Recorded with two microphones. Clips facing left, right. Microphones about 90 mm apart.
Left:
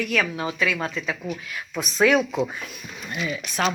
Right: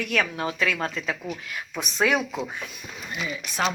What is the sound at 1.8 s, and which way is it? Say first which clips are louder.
Speech: left 4 dB; 20° right (ahead or behind).